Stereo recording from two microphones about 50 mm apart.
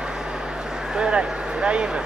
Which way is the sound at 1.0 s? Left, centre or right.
Right.